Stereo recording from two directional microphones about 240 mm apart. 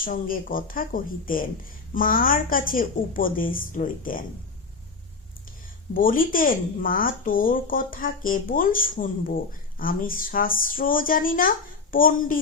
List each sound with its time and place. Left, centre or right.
0.0 s speech: left
5.9 s speech: left